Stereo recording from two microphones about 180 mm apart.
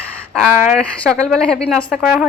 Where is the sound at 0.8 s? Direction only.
5° left (ahead or behind).